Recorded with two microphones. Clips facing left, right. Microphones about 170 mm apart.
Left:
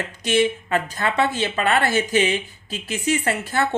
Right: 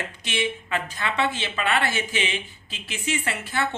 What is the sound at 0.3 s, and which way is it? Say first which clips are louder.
A woman's voice: left 9 dB; 40° left (ahead or behind).